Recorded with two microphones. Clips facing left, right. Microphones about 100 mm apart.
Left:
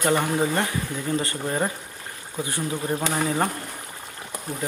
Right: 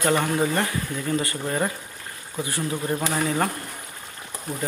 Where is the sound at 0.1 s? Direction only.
15° left (ahead or behind).